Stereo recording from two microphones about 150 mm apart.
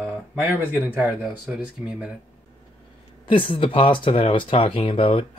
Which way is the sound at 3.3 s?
35° left (ahead or behind).